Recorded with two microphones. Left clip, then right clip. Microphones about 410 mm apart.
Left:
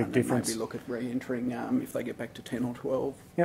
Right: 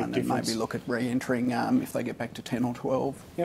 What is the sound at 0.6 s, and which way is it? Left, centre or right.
Speech, right.